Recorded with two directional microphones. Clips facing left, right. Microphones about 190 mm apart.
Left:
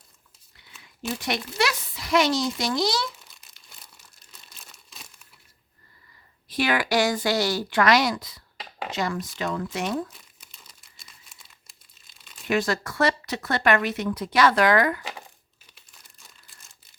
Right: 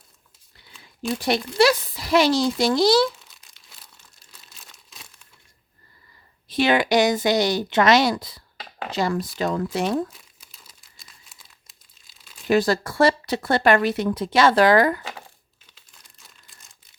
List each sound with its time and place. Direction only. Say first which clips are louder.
1.2 s speech: right 8 dB; 35° right (ahead or behind)
3.2 s crumpling: even; centre (ahead or behind)
6.5 s speech: right 5 dB; 25° right (ahead or behind)
10.1 s crumpling: right 1 dB; centre (ahead or behind)
12.5 s speech: right 5 dB; 35° right (ahead or behind)